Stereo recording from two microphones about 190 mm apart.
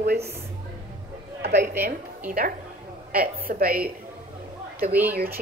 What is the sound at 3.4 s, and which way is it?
Speech, 50° right (ahead or behind).